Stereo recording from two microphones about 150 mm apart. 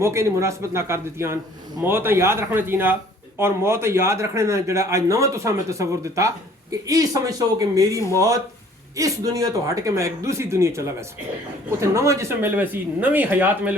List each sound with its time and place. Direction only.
0.0 s a man's voice: 20° right (ahead or behind)